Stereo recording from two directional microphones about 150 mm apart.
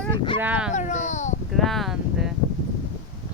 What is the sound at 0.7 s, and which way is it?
Speech, 55° left (ahead or behind).